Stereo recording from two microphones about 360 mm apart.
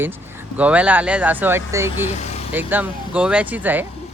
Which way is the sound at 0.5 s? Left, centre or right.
Centre.